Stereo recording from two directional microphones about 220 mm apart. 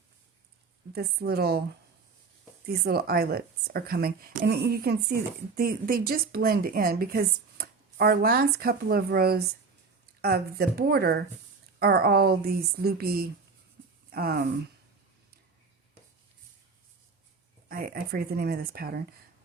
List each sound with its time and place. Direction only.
0.9 s a woman's voice: 45° right (ahead or behind)
2.6 s a woman's voice: 45° right (ahead or behind)
17.7 s a woman's voice: 40° right (ahead or behind)